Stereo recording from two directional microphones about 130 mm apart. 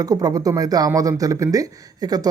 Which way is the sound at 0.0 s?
30° right (ahead or behind).